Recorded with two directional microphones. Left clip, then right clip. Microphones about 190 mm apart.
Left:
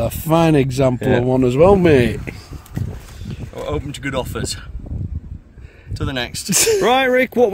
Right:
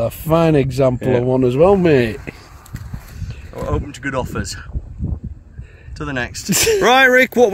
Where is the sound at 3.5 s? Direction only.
5° left (ahead or behind).